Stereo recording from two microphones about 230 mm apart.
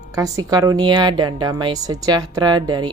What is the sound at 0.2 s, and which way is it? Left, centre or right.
Speech, centre.